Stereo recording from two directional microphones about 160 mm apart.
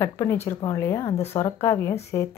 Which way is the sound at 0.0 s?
15° left (ahead or behind).